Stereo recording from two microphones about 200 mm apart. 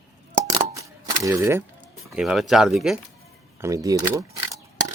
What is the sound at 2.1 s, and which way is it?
Speech, centre (ahead or behind).